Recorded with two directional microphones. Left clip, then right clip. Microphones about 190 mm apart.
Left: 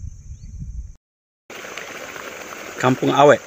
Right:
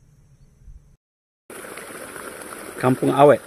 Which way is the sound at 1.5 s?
45° right (ahead or behind).